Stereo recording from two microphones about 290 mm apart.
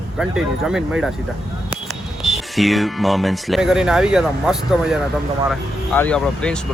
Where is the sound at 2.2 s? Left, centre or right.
Centre.